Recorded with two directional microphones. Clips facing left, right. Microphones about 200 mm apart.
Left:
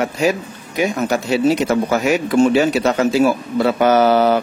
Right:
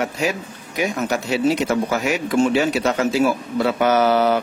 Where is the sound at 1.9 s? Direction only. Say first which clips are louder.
Left 6 dB; 45° left (ahead or behind).